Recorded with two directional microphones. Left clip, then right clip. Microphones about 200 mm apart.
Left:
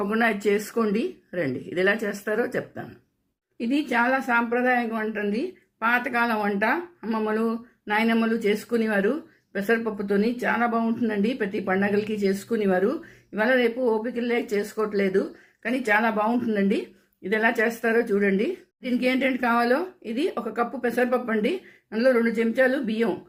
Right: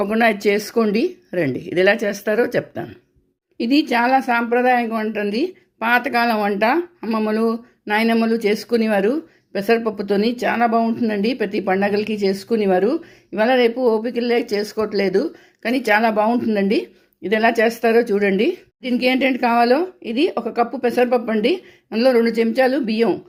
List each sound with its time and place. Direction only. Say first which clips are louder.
0.0 s a woman's voice: right 6 dB; 40° right (ahead or behind)